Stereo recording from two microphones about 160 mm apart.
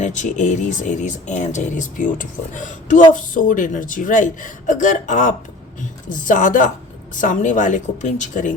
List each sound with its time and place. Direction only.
0.0 s speech: 50° left (ahead or behind)